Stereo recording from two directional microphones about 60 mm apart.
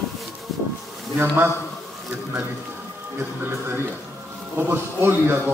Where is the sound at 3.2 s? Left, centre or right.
Right.